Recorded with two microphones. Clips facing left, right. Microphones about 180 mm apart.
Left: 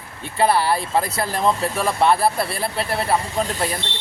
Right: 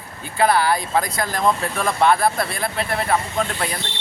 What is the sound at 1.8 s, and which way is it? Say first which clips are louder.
Speech: right 1 dB; 5° left (ahead or behind).